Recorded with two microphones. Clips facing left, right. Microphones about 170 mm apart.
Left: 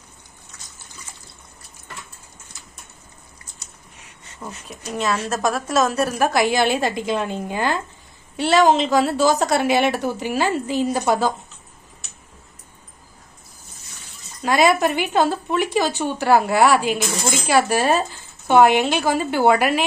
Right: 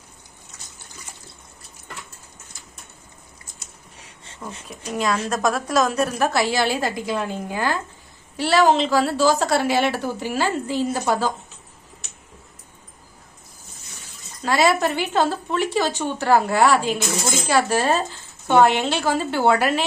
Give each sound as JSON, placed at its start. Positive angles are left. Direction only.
{"t": 4.4, "sound": "a woman's voice", "side_deg": 5}
{"t": 14.4, "sound": "speech", "side_deg": 15}